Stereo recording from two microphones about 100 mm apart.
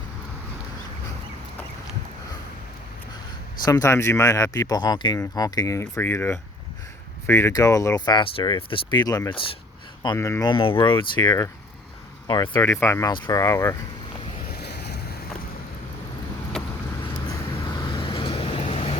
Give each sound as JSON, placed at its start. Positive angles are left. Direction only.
{"t": 3.6, "sound": "speech", "side_deg": 40}
{"t": 6.0, "sound": "speech", "side_deg": 20}
{"t": 10.2, "sound": "speech", "side_deg": 25}
{"t": 10.4, "sound": "speech", "side_deg": 60}
{"t": 12.5, "sound": "speech", "side_deg": 25}
{"t": 13.1, "sound": "speech", "side_deg": 50}
{"t": 13.3, "sound": "speech", "side_deg": 35}
{"t": 16.6, "sound": "vehicle", "side_deg": 5}
{"t": 17.7, "sound": "vehicle", "side_deg": 50}